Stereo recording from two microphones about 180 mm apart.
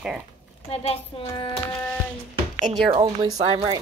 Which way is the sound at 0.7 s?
35° left (ahead or behind).